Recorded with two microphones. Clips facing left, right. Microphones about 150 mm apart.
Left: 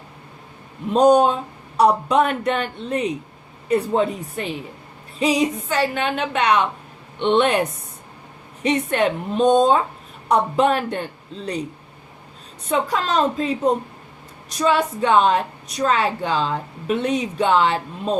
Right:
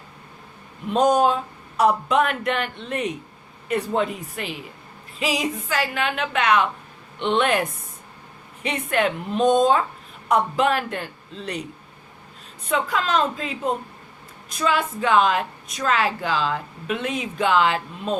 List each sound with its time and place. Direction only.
1.7 s a woman's voice: 35° left (ahead or behind)
12.6 s a woman's voice: 35° left (ahead or behind)